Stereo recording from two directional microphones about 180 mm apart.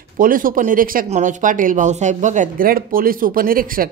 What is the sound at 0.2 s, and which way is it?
Speech, 50° right (ahead or behind).